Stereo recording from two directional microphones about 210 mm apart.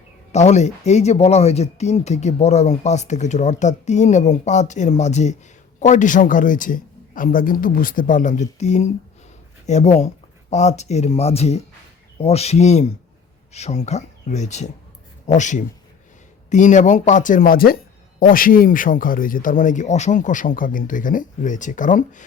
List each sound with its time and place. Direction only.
0.3 s speech: 35° left (ahead or behind)